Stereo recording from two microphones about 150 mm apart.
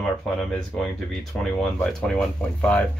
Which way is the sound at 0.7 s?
5° left (ahead or behind).